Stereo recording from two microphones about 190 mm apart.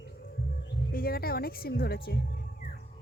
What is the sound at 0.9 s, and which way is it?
Speech, 50° left (ahead or behind).